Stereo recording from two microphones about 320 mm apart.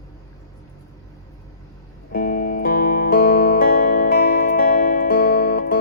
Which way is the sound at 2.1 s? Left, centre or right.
Left.